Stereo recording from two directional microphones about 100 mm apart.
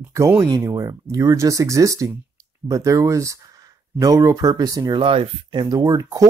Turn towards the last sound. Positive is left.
turn(degrees=-35)  # may be behind; listen again after turning